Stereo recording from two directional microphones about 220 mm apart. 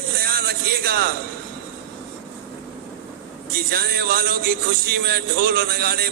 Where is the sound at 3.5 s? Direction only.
45° right (ahead or behind).